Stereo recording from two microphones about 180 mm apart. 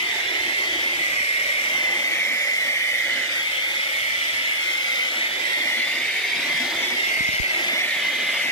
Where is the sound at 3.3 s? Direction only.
25° left (ahead or behind).